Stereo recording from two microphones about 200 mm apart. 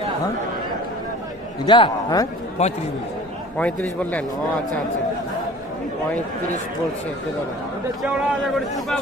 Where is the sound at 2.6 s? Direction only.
35° left (ahead or behind).